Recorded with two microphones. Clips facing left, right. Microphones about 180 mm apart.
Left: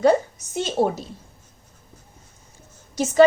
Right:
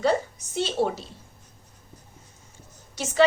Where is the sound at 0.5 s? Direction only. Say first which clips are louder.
Left 3 dB; 45° left (ahead or behind).